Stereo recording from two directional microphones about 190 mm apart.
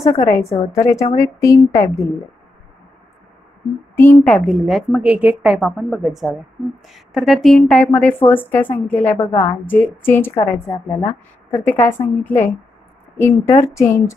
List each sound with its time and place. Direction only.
0.0 s a woman's voice: 35° left (ahead or behind)
0.7 s a woman's voice: 15° left (ahead or behind)
3.9 s a woman's voice: 10° left (ahead or behind)